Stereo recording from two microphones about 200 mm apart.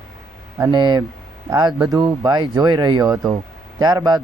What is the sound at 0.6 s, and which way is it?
Speech, 20° right (ahead or behind).